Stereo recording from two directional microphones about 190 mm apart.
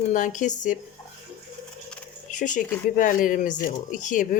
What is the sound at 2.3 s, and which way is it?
Speech, 40° left (ahead or behind).